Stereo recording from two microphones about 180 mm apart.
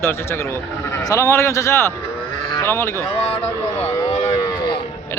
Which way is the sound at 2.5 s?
15° left (ahead or behind).